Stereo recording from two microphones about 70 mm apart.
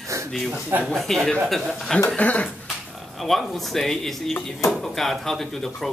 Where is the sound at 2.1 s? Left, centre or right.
Centre.